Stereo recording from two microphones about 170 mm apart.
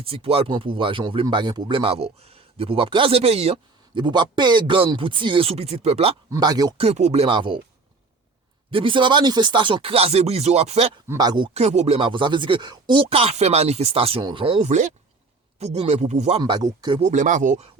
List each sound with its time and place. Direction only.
0.0 s speech: 35° right (ahead or behind)
6.3 s speech: 20° right (ahead or behind)
6.8 s speech: 40° right (ahead or behind)
8.7 s speech: 30° right (ahead or behind)
11.1 s speech: 25° right (ahead or behind); by 16.4 s 40° right (ahead or behind)
16.4 s speech: 25° right (ahead or behind)
17.0 s speech: 45° right (ahead or behind)